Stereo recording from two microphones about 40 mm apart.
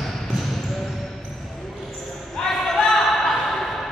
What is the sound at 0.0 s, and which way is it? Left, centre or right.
Basketball bounce, centre.